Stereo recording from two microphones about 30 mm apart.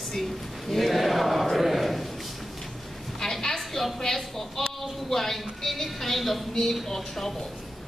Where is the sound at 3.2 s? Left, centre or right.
Centre.